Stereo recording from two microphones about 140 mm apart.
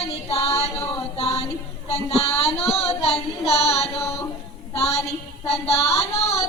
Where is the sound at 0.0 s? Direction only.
45° left (ahead or behind).